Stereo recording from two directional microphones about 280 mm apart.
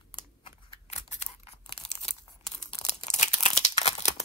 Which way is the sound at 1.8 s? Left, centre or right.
Left.